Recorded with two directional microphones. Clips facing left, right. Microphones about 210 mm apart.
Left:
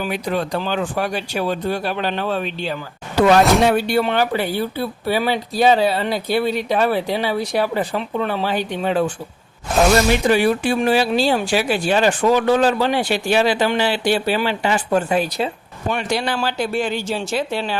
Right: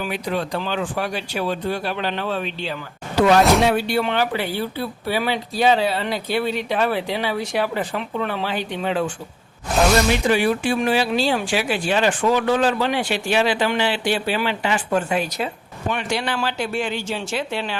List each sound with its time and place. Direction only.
0.0 s speech: 45° left (ahead or behind)
10.2 s speech: 40° left (ahead or behind)